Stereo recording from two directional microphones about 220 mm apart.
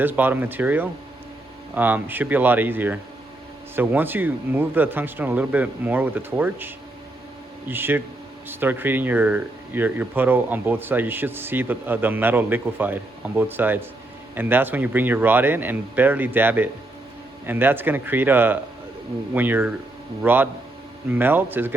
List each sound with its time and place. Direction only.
0.0 s speech: 10° right (ahead or behind)